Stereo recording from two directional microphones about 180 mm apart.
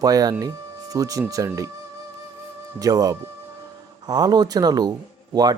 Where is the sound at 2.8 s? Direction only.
20° right (ahead or behind).